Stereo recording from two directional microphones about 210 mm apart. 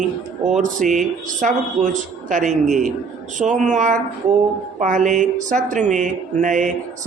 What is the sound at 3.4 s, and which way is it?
Speech, 35° right (ahead or behind).